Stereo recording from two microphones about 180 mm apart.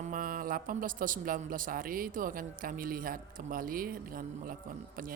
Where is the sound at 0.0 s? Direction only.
50° right (ahead or behind).